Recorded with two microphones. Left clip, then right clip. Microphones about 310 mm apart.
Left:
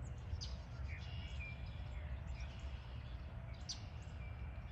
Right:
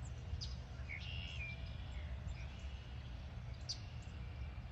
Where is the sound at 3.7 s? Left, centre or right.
Left.